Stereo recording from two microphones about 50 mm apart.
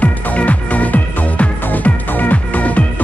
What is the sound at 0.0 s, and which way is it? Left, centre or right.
Music, left.